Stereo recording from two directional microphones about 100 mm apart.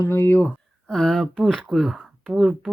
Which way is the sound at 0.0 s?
25° left (ahead or behind).